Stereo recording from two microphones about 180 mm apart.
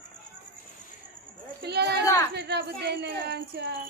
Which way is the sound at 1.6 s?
65° right (ahead or behind).